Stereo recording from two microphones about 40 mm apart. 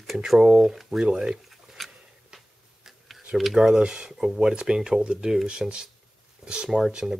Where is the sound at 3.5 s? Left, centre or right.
Centre.